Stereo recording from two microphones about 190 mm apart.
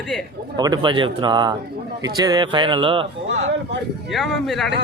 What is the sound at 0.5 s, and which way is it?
Speech, 20° right (ahead or behind).